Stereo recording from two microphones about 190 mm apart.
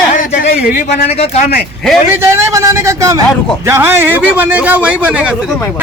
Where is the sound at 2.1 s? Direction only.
15° right (ahead or behind).